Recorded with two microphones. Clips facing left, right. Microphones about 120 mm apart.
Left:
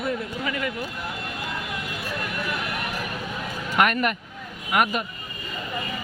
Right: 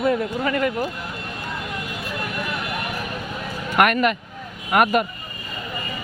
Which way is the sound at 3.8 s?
80° right.